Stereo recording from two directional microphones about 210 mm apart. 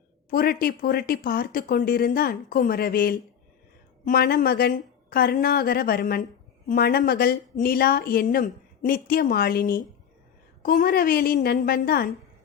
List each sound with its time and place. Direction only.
0.3 s a woman's voice: 45° left (ahead or behind)